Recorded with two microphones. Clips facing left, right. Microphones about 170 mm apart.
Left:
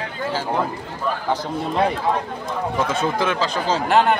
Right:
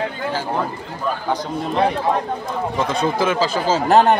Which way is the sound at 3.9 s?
40° right (ahead or behind).